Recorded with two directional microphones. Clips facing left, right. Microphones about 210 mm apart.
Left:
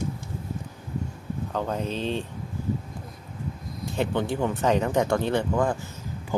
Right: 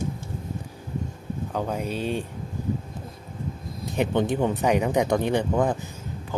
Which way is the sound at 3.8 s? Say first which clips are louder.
Right 3 dB; 20° right (ahead or behind).